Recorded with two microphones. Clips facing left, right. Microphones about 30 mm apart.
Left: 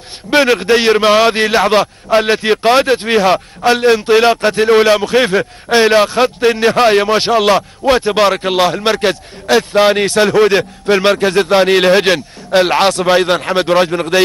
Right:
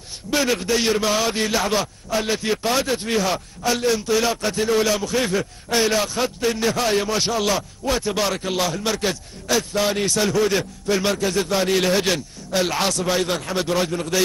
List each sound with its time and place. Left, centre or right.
0.3 s a man's voice: left